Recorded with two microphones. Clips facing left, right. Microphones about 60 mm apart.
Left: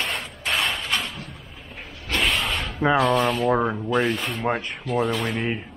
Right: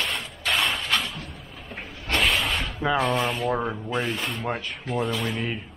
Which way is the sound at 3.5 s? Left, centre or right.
Centre.